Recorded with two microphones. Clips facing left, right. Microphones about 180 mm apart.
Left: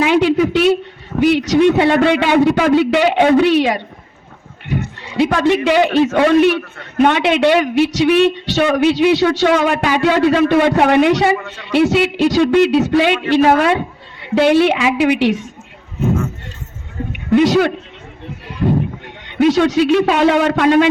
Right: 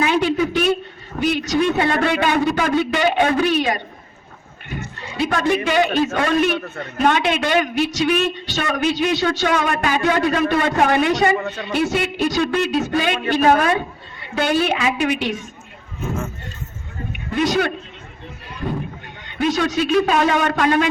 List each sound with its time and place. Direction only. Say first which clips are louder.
0.0 s a woman's voice: left 5 dB; 75° left (ahead or behind)
11.3 s speech: right 4 dB; 35° right (ahead or behind)
11.6 s a man's voice: left 11 dB; 75° left (ahead or behind)
17.3 s a man's voice: left 7 dB; 75° left (ahead or behind)
19.3 s a man's voice: left 7 dB; 75° left (ahead or behind)